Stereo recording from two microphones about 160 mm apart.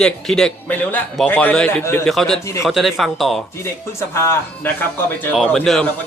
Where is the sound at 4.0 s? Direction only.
15° left (ahead or behind).